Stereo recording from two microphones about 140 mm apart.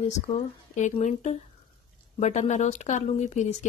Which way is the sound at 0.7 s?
60° left (ahead or behind).